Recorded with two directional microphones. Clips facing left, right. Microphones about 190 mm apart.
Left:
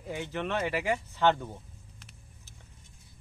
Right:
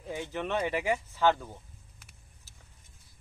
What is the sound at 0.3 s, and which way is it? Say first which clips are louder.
Speech: even; 10° right (ahead or behind).